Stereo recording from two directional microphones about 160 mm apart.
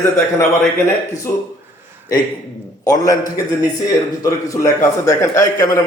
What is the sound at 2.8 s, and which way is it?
A man's voice, 20° left (ahead or behind).